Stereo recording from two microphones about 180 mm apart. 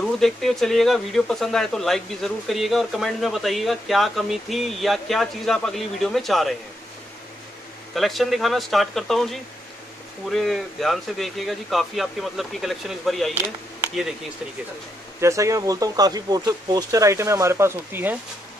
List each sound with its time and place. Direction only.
0.0 s speech: centre (ahead or behind)
7.9 s speech: centre (ahead or behind)
15.1 s speech: 15° right (ahead or behind)